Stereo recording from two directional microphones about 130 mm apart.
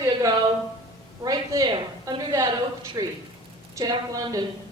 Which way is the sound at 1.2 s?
25° right (ahead or behind).